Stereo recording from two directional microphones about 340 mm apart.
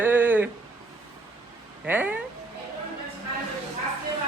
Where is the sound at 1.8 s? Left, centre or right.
Centre.